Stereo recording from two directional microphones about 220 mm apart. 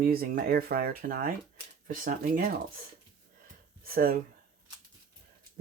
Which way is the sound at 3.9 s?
40° right (ahead or behind).